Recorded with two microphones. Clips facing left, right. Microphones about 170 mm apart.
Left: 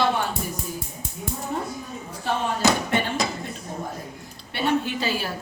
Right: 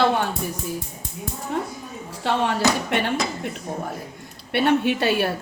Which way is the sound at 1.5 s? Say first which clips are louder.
Right 4 dB; 85° right.